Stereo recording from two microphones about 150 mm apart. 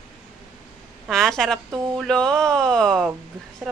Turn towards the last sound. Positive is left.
turn(degrees=0)  # may be behind; listen again after turning